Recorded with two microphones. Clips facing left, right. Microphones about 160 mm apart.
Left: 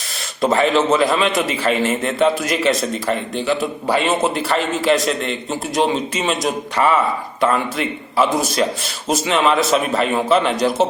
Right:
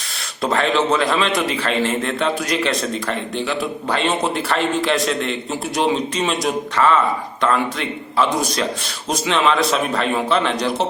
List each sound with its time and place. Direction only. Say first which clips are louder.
0.5 s a man's voice: left 2 dB; 5° left (ahead or behind)